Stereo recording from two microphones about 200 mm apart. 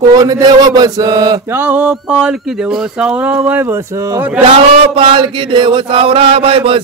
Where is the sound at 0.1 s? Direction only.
20° right (ahead or behind).